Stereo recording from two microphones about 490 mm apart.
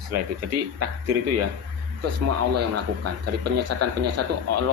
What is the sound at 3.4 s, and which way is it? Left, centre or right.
Speech, right.